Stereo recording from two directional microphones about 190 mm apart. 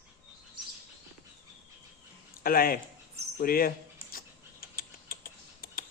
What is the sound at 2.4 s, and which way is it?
Speech, 50° left (ahead or behind).